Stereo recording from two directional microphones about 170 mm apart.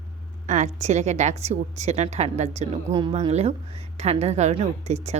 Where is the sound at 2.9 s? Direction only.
30° right (ahead or behind).